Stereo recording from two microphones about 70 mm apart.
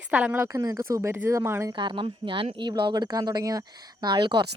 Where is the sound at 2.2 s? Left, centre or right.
Right.